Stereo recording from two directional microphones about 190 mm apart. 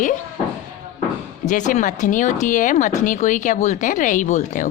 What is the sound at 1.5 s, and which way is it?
A woman's voice, 40° left (ahead or behind).